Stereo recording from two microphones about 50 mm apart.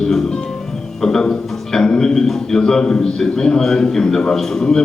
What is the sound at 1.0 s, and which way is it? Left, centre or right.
A man's voice, centre.